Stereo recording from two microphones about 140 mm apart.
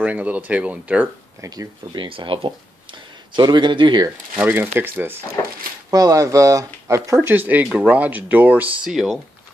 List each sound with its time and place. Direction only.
0.0 s speech: 10° right (ahead or behind)
1.4 s speech: 25° right (ahead or behind)
4.4 s speech: 15° right (ahead or behind)
5.9 s speech: 25° right (ahead or behind)
7.2 s speech: 10° right (ahead or behind)